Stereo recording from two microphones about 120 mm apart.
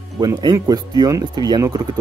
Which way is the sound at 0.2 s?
35° right (ahead or behind).